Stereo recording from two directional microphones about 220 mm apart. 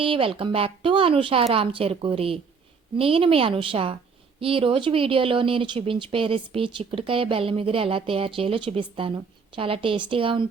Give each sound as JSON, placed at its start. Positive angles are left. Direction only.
{"t": 0.0, "sound": "speech", "side_deg": -25}